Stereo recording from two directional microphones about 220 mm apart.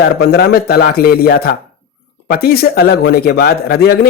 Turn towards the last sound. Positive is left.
turn(degrees=45)  # may be behind; listen again after turning